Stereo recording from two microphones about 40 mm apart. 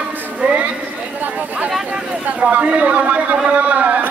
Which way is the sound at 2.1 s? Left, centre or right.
Right.